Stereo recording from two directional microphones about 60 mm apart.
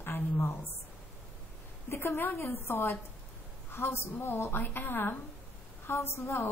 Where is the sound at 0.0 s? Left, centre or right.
Left.